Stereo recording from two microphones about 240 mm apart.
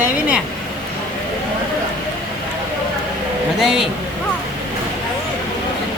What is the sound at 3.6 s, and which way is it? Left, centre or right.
Speech, centre.